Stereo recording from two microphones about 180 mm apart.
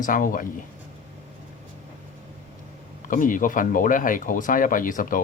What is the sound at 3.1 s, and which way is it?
Speech, 50° left (ahead or behind).